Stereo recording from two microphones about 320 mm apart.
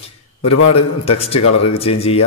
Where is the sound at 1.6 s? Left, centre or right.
Centre.